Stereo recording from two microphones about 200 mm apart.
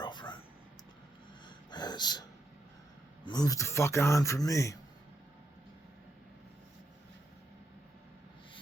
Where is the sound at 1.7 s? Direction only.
20° left (ahead or behind).